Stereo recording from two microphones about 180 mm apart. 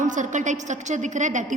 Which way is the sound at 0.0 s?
45° right (ahead or behind).